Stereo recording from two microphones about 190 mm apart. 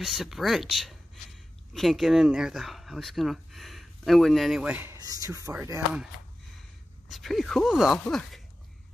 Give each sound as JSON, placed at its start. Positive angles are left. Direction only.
{"t": 0.0, "sound": "speech", "side_deg": 0}
{"t": 4.9, "sound": "speech", "side_deg": -20}
{"t": 7.1, "sound": "speech", "side_deg": 0}